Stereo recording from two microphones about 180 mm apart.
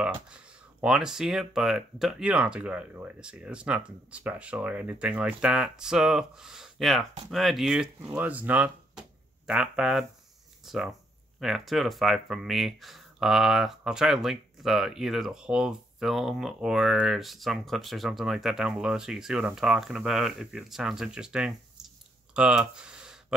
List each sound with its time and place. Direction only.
0.0 s speech: 5° right (ahead or behind)